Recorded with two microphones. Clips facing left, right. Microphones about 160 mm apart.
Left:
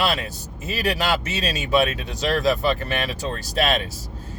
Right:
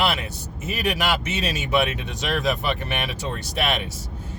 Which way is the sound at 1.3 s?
20° right (ahead or behind).